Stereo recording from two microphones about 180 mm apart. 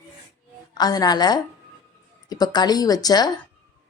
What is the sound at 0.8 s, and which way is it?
Speech, 20° left (ahead or behind).